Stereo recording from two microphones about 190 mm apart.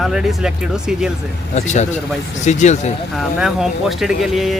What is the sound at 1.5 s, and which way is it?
A man's voice, 40° left (ahead or behind).